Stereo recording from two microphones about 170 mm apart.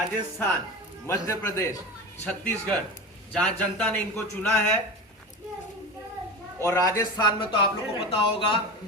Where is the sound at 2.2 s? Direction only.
5° left (ahead or behind).